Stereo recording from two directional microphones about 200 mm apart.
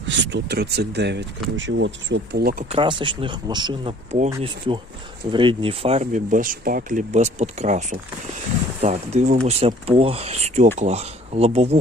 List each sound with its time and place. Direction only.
0.0 s speech: 60° right (ahead or behind)
1.5 s speech: 70° right (ahead or behind); by 2.6 s 50° right (ahead or behind)
2.6 s speech: 25° right (ahead or behind)